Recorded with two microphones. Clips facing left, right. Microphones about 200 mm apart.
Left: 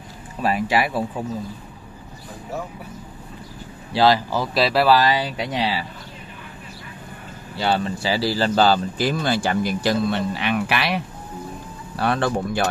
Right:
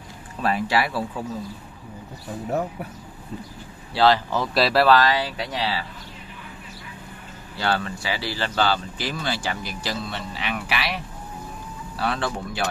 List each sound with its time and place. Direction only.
0.4 s speech: 10° left (ahead or behind)
3.9 s speech: 10° left (ahead or behind)
7.5 s speech: 20° left (ahead or behind)
8.0 s speech: 35° left (ahead or behind); by 11.0 s 55° left (ahead or behind)
12.0 s speech: 50° left (ahead or behind)